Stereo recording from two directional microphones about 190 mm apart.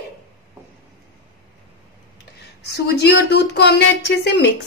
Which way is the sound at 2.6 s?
60° left (ahead or behind).